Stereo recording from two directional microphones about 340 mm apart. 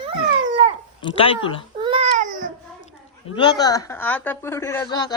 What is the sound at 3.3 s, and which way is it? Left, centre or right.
A woman's voice, centre.